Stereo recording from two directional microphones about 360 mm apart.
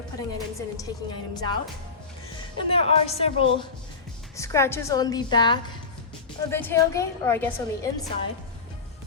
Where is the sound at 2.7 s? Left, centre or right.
Centre.